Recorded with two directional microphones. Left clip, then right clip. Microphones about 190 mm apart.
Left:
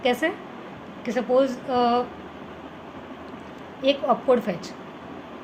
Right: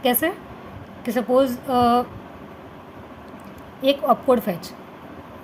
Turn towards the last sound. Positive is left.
turn(degrees=-50)  # may be behind; listen again after turning